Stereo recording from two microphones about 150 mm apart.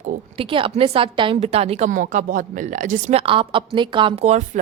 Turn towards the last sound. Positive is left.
turn(degrees=-50)  # may be behind; listen again after turning